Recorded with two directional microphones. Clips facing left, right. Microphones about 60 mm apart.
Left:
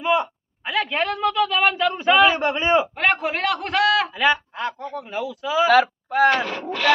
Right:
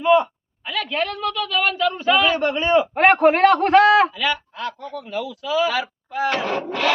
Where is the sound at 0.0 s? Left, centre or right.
Centre.